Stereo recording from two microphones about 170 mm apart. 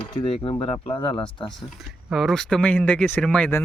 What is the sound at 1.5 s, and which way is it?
Speech, centre (ahead or behind).